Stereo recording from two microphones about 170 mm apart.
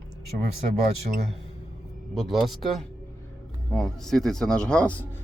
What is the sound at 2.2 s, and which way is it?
Speech, centre (ahead or behind).